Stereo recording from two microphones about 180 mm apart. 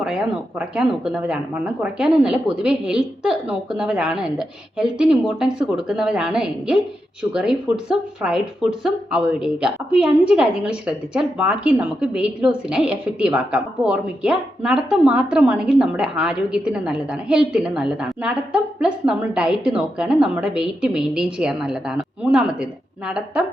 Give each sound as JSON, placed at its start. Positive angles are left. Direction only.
{"t": 0.0, "sound": "a woman's voice", "side_deg": -5}